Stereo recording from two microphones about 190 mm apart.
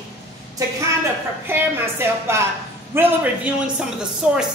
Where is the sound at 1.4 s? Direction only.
10° right (ahead or behind).